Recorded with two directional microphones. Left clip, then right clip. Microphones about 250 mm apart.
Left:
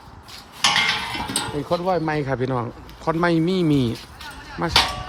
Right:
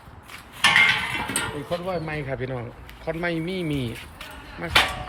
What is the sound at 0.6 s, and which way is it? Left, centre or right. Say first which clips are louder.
Cutlery: right 2 dB; left.